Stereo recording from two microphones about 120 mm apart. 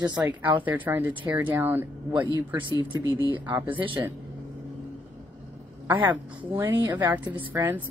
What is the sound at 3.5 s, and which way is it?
Speech, 15° right (ahead or behind).